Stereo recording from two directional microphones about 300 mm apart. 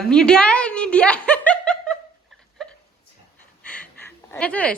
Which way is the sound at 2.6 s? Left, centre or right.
Centre.